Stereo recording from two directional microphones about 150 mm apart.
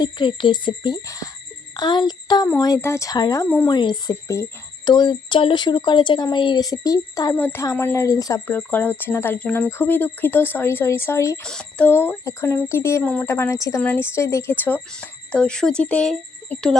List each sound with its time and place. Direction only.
0.0 s speech: 30° left (ahead or behind)
8.5 s speech: 10° left (ahead or behind)
11.4 s speech: 5° left (ahead or behind)